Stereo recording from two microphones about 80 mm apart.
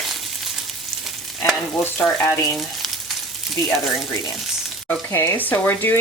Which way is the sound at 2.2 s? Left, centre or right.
Left.